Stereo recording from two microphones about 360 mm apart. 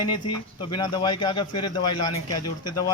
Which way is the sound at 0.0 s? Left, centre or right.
Centre.